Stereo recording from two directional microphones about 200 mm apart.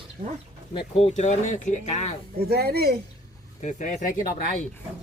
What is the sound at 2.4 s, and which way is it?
Speech, 50° right (ahead or behind).